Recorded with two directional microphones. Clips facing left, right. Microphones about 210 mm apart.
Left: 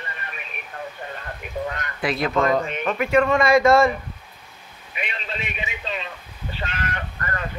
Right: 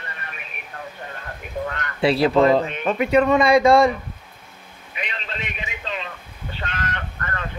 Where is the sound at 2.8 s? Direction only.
15° right (ahead or behind).